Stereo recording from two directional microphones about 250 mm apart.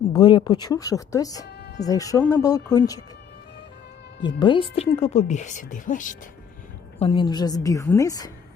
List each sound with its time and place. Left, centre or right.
0.1 s speech: centre
1.5 s music: left
1.8 s speech: centre
4.2 s speech: centre
7.0 s speech: left